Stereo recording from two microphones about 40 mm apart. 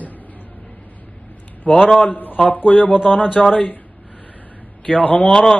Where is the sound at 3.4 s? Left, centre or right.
Centre.